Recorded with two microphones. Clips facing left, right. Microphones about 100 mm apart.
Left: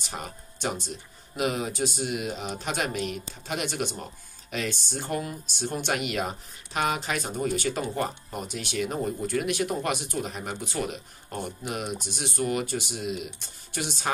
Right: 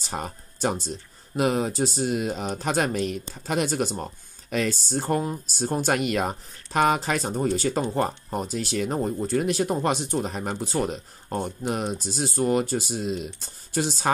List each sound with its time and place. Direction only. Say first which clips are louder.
0.0 s speech: right 5 dB; 35° right (ahead or behind)